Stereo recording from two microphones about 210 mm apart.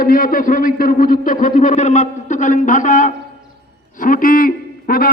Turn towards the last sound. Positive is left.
turn(degrees=45)  # may be behind; listen again after turning